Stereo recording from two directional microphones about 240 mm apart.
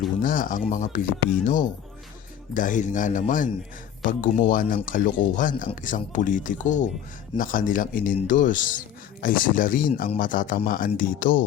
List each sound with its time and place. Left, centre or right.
0.2 s speech: left
2.6 s speech: left